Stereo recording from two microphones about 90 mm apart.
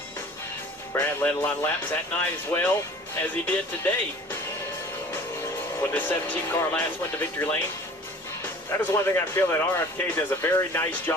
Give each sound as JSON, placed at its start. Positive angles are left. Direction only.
{"t": 0.9, "sound": "speech", "side_deg": 20}
{"t": 5.9, "sound": "speech", "side_deg": 20}
{"t": 8.9, "sound": "speech", "side_deg": 25}